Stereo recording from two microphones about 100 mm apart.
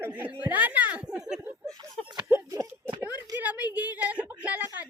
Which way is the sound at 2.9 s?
20° right (ahead or behind).